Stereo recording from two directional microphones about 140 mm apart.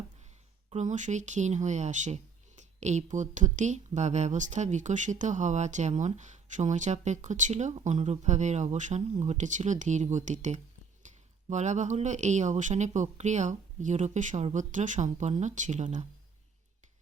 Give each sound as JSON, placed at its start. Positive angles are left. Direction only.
{"t": 0.7, "sound": "speech", "side_deg": -55}